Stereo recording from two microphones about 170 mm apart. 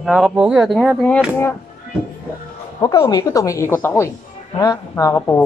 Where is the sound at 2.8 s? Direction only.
20° left (ahead or behind).